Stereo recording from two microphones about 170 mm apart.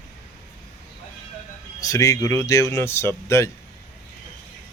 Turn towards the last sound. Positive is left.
turn(degrees=15)  # may be behind; listen again after turning